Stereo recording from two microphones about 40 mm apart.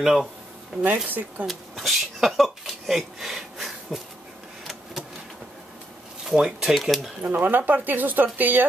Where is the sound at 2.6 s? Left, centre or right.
Centre.